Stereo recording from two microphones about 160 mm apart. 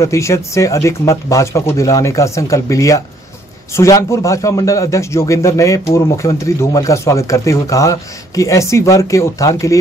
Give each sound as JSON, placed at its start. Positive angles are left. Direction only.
{"t": 0.0, "sound": "a man's voice", "side_deg": 20}